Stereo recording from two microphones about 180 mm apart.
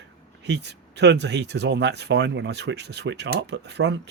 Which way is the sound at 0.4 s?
70° right (ahead or behind).